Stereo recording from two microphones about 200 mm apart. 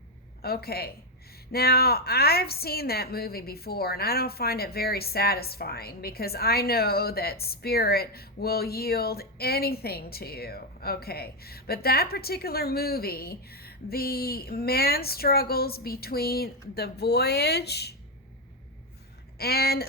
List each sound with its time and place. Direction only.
0.4 s speech: 50° left (ahead or behind)
19.4 s speech: 50° left (ahead or behind)